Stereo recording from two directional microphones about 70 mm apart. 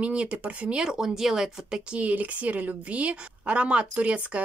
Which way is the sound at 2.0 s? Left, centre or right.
Right.